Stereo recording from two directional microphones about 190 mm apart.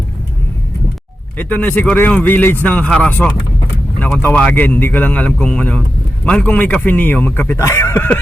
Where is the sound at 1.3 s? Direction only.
10° left (ahead or behind).